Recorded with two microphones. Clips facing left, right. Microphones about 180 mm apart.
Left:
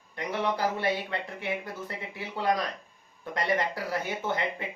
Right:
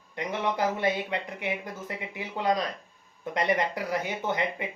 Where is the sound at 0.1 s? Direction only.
20° right (ahead or behind).